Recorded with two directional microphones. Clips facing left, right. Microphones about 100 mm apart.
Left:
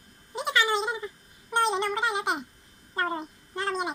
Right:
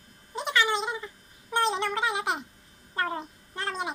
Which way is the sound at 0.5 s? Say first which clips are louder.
Left 1 dB; 20° left (ahead or behind).